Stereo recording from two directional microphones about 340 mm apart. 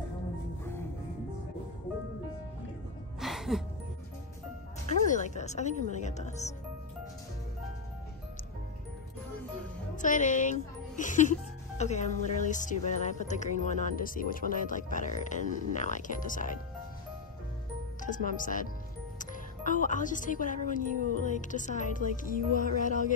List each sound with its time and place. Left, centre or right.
3.2 s music: centre
4.8 s speech: left
10.0 s music: left
18.0 s music: left
19.1 s speech: left
21.2 s music: left